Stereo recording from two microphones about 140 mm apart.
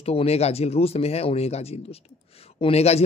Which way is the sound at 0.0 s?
45° left (ahead or behind).